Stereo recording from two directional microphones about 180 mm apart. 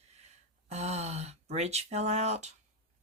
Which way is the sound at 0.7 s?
35° right (ahead or behind).